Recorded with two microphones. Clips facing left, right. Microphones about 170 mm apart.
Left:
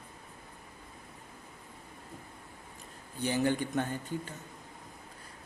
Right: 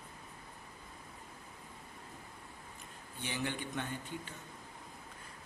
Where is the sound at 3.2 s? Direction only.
40° left (ahead or behind).